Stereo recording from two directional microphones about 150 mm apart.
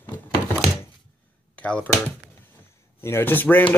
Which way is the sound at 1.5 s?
10° left (ahead or behind).